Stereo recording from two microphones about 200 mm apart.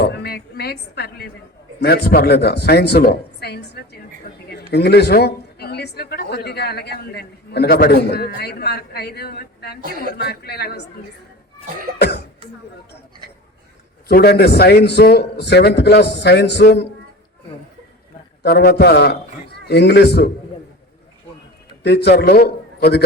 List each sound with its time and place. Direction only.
0.0 s a woman's voice: 55° left (ahead or behind)
11.9 s a man's voice: 55° left (ahead or behind)
14.1 s a man's voice: 50° left (ahead or behind)
18.4 s a woman's voice: 50° left (ahead or behind)
21.8 s a man's voice: 55° left (ahead or behind)